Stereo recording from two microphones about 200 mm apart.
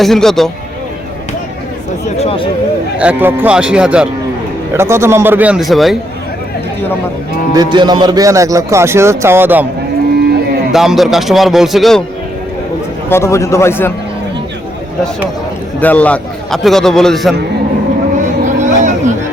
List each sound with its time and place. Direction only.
0.0 s a man's voice: centre (ahead or behind)
2.1 s speech: 30° left (ahead or behind)
3.0 s a man's voice: 10° right (ahead or behind)
7.5 s speech: 20° right (ahead or behind)
10.7 s a man's voice: centre (ahead or behind)
13.1 s a man's voice: 15° left (ahead or behind)
15.8 s a man's voice: 5° left (ahead or behind)
18.4 s chatter: 40° right (ahead or behind)